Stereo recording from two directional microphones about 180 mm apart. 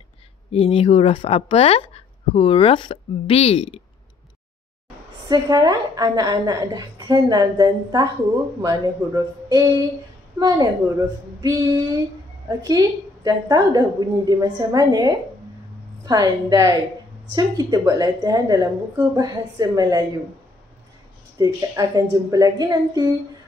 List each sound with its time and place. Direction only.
0.5 s speech: 35° left (ahead or behind)
5.3 s a woman's voice: 20° right (ahead or behind)
21.4 s a woman's voice: 20° right (ahead or behind)